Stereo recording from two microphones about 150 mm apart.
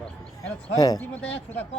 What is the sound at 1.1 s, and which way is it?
Speech, 10° left (ahead or behind).